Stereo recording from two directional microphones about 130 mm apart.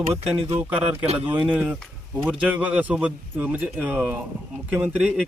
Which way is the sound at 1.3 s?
10° right (ahead or behind).